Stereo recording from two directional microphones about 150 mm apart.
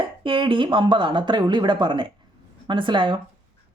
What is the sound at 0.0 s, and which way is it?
Speech, 35° right (ahead or behind).